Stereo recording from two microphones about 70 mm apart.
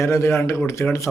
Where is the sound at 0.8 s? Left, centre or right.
Left.